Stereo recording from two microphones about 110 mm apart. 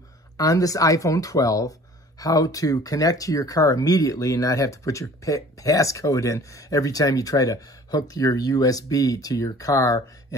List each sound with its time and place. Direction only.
0.4 s speech: 30° left (ahead or behind)